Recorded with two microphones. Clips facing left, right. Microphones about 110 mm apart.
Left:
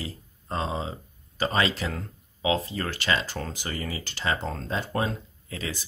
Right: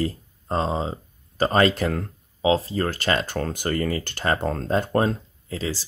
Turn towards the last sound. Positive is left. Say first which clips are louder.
# right 6 dB
turn(degrees=-30)  # may be behind; listen again after turning